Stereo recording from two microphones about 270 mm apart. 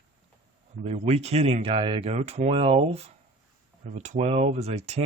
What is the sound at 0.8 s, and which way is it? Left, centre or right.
Speech, right.